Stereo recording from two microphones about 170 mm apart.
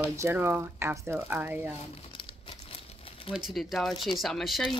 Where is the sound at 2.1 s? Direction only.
30° left (ahead or behind).